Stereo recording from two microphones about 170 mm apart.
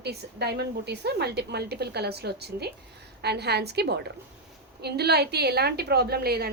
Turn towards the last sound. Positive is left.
turn(degrees=-65)  # may be behind; listen again after turning